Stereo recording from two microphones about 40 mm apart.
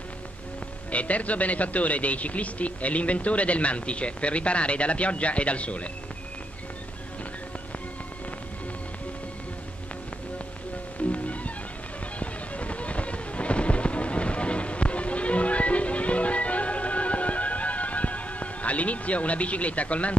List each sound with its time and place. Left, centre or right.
0.9 s speech: left
11.1 s music: left